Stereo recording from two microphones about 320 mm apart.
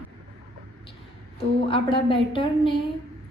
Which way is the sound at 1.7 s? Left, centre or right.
Centre.